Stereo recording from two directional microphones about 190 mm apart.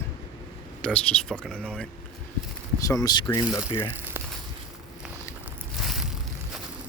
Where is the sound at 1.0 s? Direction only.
5° left (ahead or behind).